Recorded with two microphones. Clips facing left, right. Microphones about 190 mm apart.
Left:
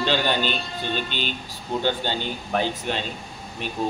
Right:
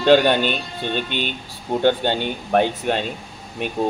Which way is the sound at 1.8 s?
55° right (ahead or behind).